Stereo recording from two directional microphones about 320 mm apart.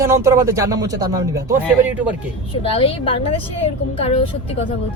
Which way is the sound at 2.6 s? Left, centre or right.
Centre.